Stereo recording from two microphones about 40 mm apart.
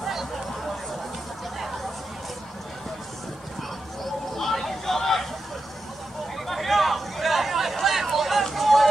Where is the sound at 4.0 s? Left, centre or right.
Centre.